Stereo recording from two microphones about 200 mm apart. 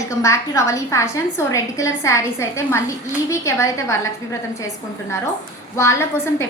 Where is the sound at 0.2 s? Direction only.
15° left (ahead or behind).